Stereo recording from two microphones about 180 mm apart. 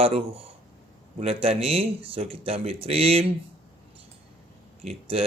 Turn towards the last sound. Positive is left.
turn(degrees=-30)  # may be behind; listen again after turning